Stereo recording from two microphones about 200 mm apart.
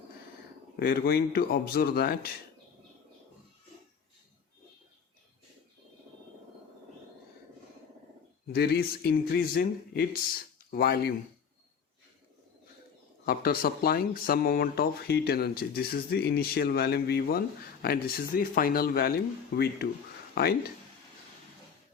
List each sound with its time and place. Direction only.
0.8 s speech: 50° left (ahead or behind)
8.5 s speech: 50° left (ahead or behind)
13.2 s speech: 50° left (ahead or behind)